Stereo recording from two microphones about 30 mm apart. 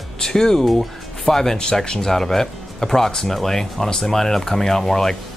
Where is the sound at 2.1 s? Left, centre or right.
Centre.